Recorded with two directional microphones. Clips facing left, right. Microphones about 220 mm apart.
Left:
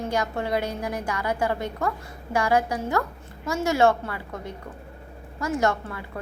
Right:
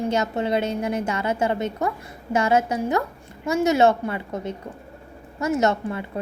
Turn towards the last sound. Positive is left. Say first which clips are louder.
# right 3 dB
turn(degrees=-20)  # may be behind; listen again after turning